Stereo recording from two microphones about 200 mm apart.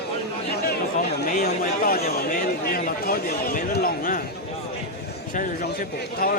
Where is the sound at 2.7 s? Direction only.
45° left (ahead or behind).